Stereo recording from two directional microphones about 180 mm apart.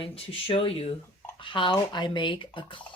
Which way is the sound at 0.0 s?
30° left (ahead or behind).